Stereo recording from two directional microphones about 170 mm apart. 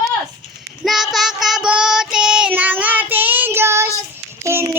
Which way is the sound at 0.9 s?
Centre (ahead or behind).